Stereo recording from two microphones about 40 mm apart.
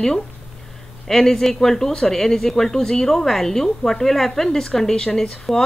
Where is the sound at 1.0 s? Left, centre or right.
Centre.